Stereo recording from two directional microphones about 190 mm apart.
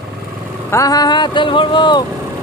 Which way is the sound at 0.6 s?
15° left (ahead or behind).